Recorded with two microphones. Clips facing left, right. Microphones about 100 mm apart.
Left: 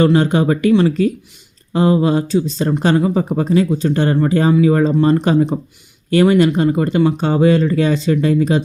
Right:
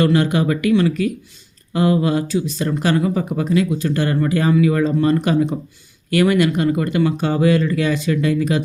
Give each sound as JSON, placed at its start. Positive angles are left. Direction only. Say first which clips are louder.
{"t": 0.0, "sound": "speech", "louder": "left 3 dB", "side_deg": 30}